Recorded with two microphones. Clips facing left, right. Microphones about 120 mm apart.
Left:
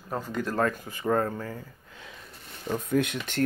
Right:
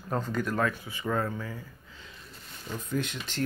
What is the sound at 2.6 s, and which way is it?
Speech, 60° left (ahead or behind).